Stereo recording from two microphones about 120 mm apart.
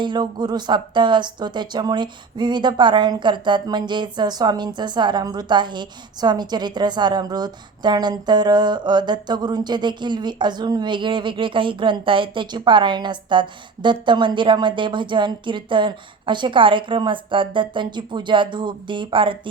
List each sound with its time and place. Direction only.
0.0 s speech: 40° right (ahead or behind)